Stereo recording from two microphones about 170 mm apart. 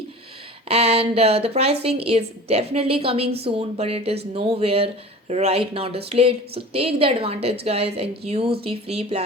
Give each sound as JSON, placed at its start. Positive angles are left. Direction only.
{"t": 0.7, "sound": "a woman's voice", "side_deg": -35}